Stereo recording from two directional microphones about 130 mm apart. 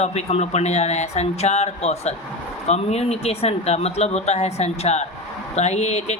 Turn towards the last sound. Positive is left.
turn(degrees=60)  # may be behind; listen again after turning